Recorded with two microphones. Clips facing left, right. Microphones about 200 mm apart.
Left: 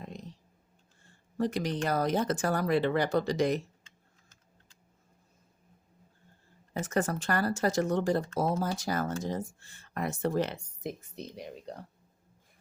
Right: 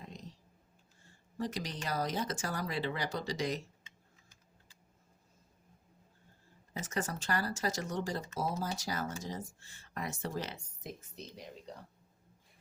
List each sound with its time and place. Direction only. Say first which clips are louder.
0.0 s a sound: left 6 dB; 55° left (ahead or behind)
1.4 s speech: left 8 dB; 55° left (ahead or behind)
6.7 s speech: left 7 dB; 55° left (ahead or behind)